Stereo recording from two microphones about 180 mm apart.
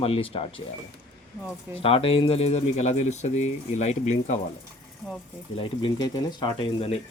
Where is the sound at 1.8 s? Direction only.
30° left (ahead or behind).